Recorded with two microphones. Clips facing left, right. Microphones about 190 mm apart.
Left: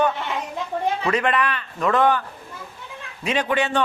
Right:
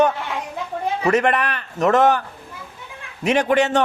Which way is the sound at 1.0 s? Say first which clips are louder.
Right 7 dB; 45° right (ahead or behind).